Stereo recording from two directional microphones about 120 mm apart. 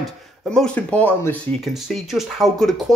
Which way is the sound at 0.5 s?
10° left (ahead or behind).